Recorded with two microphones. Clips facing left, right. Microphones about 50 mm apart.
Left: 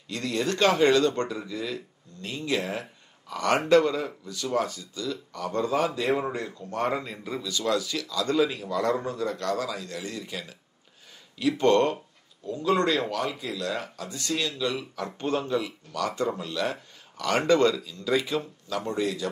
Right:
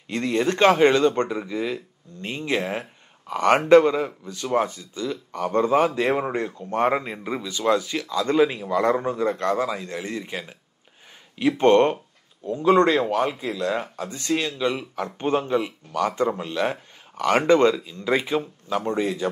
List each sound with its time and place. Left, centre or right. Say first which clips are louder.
0.1 s speech: right 5 dB; right